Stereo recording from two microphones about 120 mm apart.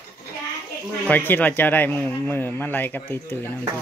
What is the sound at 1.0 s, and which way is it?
Speech, 15° left (ahead or behind).